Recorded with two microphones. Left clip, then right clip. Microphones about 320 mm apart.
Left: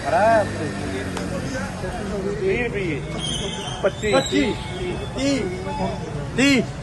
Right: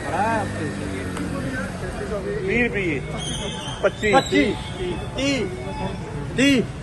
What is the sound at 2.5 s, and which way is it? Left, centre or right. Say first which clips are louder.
Speech: right 2 dB; right.